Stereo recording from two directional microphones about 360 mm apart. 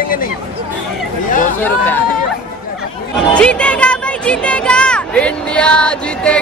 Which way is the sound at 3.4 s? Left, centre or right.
Centre.